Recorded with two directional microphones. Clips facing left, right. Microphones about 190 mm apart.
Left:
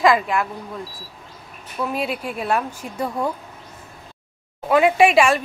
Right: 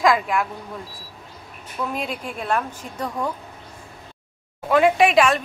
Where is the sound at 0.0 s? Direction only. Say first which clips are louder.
Left 2 dB; centre (ahead or behind).